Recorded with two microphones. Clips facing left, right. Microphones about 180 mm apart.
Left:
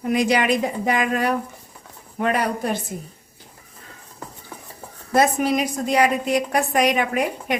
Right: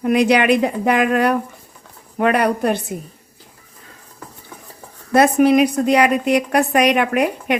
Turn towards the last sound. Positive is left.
turn(degrees=-65)  # may be behind; listen again after turning